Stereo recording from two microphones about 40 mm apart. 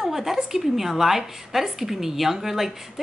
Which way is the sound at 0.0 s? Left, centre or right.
Centre.